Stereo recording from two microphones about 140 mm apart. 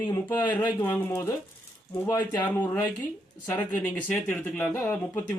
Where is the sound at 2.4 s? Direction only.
15° left (ahead or behind).